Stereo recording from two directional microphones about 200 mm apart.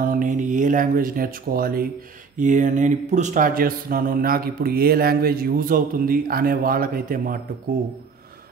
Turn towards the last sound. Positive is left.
turn(degrees=-45)  # may be behind; listen again after turning